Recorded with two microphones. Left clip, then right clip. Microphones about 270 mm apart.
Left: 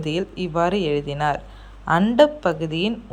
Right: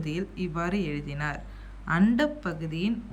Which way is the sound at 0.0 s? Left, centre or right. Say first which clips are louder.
Left 8 dB; centre.